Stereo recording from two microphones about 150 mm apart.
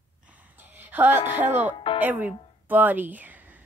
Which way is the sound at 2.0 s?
10° right (ahead or behind).